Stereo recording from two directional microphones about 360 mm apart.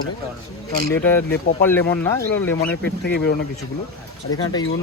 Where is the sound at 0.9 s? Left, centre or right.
Centre.